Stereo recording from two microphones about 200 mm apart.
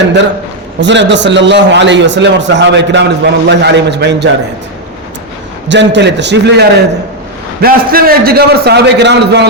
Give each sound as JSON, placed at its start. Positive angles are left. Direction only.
{"t": 0.8, "sound": "a man's voice", "side_deg": -60}
{"t": 5.6, "sound": "a man's voice", "side_deg": -60}